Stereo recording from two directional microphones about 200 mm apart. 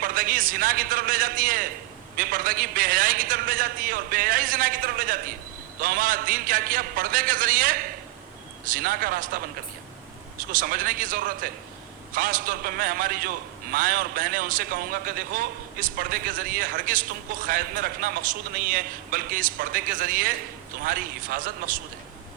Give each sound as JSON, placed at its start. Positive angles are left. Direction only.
{"t": 0.0, "sound": "a man's voice", "side_deg": -45}
{"t": 10.5, "sound": "a man's voice", "side_deg": -45}